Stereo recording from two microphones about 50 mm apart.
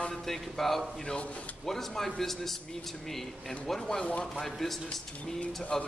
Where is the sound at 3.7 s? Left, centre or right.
Centre.